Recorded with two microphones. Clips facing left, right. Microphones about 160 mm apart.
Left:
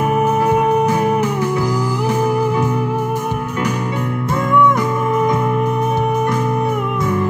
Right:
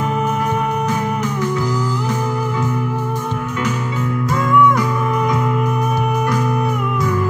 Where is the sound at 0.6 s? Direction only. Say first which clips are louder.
Left 5 dB; 25° left (ahead or behind).